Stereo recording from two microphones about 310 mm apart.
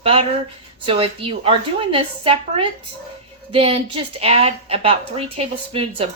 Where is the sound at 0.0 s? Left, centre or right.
Centre.